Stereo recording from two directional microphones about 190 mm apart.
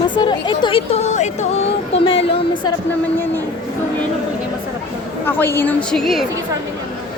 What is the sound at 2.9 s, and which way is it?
Speech, 10° left (ahead or behind).